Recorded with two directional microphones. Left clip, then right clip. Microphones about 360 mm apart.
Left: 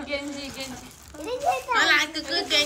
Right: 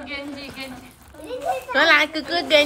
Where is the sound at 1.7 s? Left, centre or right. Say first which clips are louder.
Right 6 dB; centre.